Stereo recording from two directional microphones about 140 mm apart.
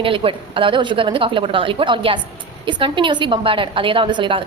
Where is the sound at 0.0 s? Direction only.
40° right (ahead or behind).